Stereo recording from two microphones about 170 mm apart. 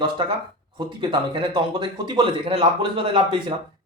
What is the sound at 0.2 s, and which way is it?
Speech, 30° right (ahead or behind).